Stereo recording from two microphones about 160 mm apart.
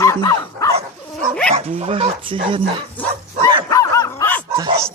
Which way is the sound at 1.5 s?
35° right (ahead or behind).